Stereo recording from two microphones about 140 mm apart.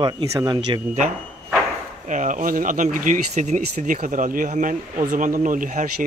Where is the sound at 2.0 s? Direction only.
65° right (ahead or behind).